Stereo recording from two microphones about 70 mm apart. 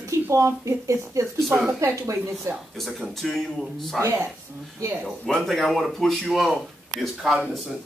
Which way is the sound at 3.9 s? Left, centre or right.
Right.